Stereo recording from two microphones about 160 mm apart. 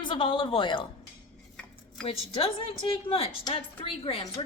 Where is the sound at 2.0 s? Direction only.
35° left (ahead or behind).